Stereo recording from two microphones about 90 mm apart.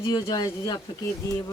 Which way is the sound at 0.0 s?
50° left (ahead or behind).